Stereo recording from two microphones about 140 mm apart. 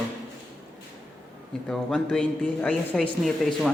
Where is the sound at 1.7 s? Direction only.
5° left (ahead or behind).